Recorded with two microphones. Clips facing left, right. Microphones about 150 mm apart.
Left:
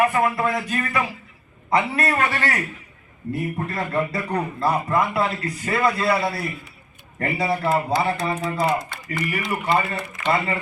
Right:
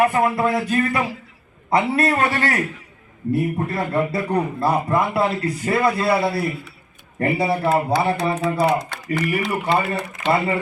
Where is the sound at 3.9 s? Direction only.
25° right (ahead or behind).